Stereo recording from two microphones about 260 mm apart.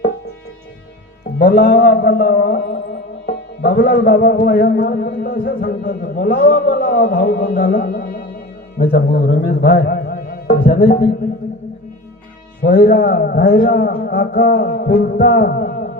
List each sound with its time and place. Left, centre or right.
1.4 s music: left
8.8 s speech: left
12.6 s music: left